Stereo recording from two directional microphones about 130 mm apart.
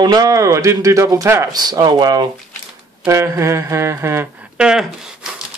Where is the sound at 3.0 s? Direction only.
20° right (ahead or behind).